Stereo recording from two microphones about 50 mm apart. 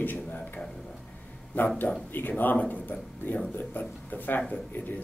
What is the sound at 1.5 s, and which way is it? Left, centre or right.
Speech, left.